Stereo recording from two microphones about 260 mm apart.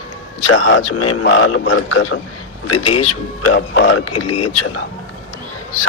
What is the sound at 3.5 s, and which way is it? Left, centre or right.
Speech, left.